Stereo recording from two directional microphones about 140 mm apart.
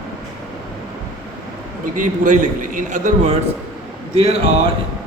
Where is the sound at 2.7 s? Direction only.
65° right (ahead or behind).